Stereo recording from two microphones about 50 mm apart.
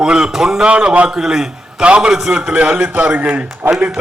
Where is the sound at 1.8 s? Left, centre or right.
Right.